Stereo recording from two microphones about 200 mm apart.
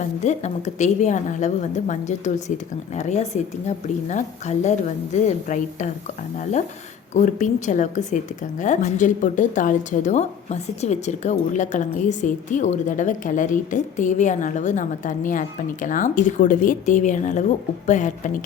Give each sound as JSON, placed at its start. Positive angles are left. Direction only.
{"t": 0.0, "sound": "a woman's voice", "side_deg": 35}